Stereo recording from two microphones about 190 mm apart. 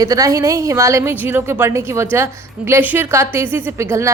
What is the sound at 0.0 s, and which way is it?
A woman's voice, 20° right (ahead or behind).